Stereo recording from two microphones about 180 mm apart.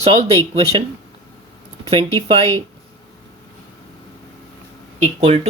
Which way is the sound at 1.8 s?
30° right (ahead or behind).